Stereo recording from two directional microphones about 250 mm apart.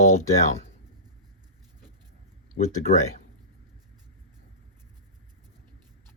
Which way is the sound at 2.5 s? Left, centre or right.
Left.